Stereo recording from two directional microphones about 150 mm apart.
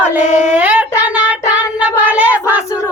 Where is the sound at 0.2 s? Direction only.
50° left (ahead or behind).